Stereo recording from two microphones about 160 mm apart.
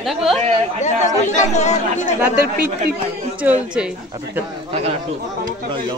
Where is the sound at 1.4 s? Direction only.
45° left (ahead or behind).